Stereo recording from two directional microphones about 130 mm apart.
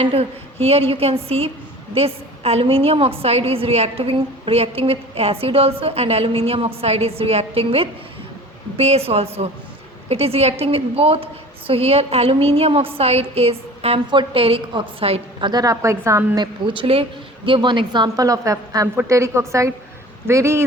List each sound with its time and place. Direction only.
0.0 s a woman's voice: 50° right (ahead or behind)
15.4 s a woman's voice: 30° right (ahead or behind)